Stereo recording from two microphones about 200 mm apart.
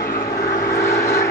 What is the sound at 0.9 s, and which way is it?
Vehicle, 15° left (ahead or behind).